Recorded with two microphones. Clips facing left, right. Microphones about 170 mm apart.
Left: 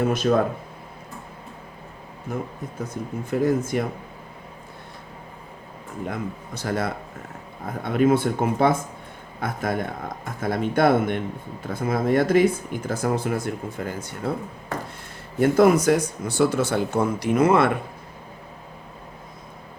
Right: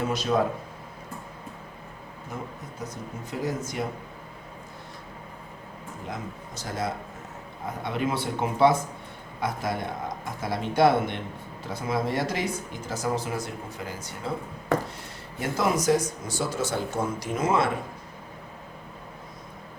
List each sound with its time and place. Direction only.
0.0 s speech: 55° left (ahead or behind)
2.3 s speech: 55° left (ahead or behind)
6.1 s speech: 60° left (ahead or behind)
15.4 s speech: 55° left (ahead or behind)